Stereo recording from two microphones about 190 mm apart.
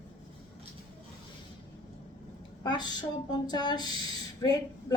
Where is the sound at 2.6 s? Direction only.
20° left (ahead or behind).